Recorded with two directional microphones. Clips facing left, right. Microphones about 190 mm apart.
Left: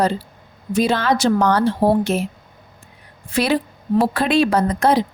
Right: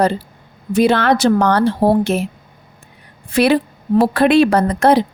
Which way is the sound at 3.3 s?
65° right (ahead or behind).